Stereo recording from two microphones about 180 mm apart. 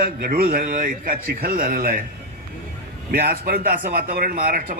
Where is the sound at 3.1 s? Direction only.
55° right (ahead or behind).